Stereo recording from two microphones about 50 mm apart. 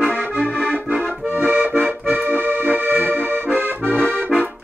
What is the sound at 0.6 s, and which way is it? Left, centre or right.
Accordion, right.